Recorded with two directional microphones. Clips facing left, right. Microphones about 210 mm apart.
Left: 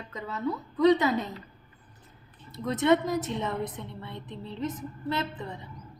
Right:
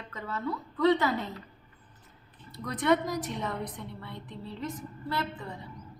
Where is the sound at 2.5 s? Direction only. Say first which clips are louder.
Left 3 dB; 25° left (ahead or behind).